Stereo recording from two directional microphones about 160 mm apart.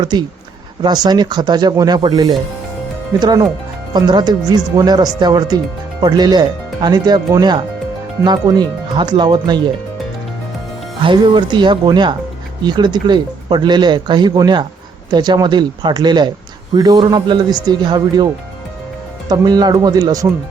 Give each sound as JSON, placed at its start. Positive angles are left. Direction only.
{"t": 0.0, "sound": "speech", "side_deg": -25}
{"t": 11.0, "sound": "speech", "side_deg": -30}
{"t": 19.3, "sound": "speech", "side_deg": -25}